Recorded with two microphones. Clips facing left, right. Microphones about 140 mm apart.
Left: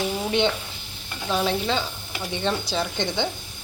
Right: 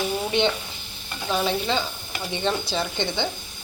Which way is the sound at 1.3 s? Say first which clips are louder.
Even; centre (ahead or behind).